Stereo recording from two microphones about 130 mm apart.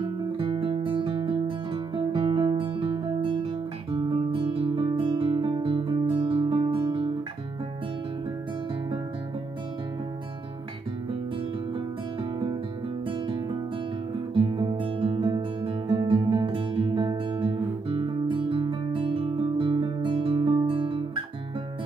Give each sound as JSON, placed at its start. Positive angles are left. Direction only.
{"t": 0.0, "sound": "music", "side_deg": -40}
{"t": 12.2, "sound": "music", "side_deg": -40}
{"t": 14.3, "sound": "music", "side_deg": -40}